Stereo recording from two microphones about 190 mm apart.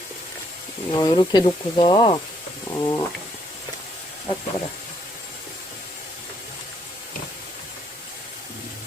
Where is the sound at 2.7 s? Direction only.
15° left (ahead or behind).